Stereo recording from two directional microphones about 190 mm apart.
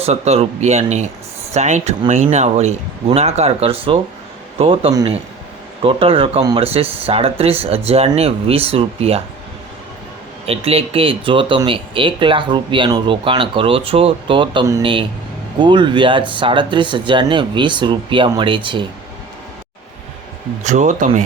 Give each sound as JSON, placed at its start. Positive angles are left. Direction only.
{"t": 0.0, "sound": "speech", "side_deg": -35}
{"t": 10.4, "sound": "speech", "side_deg": -30}
{"t": 20.7, "sound": "speech", "side_deg": -40}